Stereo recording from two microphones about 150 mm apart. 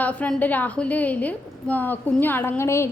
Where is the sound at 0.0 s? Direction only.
10° left (ahead or behind).